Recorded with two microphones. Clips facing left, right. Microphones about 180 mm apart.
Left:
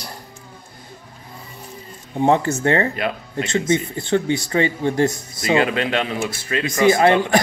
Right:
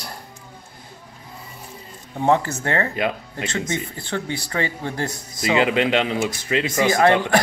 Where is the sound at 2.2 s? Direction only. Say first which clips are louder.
Left 2 dB; 20° left (ahead or behind).